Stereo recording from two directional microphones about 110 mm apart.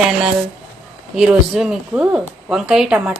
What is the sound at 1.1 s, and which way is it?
A woman's voice, 5° right (ahead or behind).